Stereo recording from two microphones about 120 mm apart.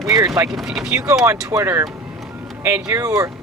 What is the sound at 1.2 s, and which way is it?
Speech, 20° right (ahead or behind).